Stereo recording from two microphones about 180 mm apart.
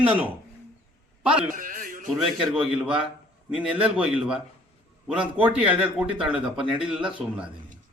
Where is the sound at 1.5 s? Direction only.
50° right (ahead or behind).